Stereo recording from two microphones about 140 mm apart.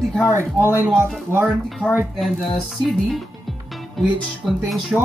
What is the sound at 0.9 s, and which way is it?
Speech, 5° left (ahead or behind).